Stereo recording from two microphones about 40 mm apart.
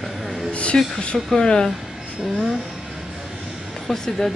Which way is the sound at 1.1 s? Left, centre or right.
Centre.